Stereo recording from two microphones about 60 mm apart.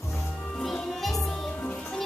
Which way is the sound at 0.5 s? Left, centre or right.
Centre.